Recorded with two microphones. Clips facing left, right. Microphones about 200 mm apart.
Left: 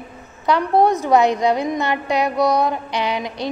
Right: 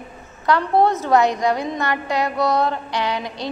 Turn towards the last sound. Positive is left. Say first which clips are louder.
# left 1 dB
turn(degrees=20)  # may be behind; listen again after turning